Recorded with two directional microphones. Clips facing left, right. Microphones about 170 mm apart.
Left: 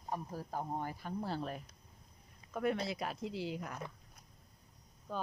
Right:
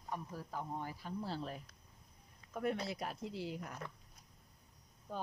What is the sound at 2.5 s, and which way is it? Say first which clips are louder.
Speech: left 3 dB; 90° left.